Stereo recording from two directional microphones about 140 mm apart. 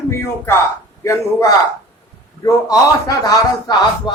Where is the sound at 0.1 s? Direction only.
20° left (ahead or behind).